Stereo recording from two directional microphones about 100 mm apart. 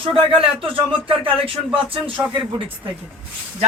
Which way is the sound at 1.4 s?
65° right (ahead or behind).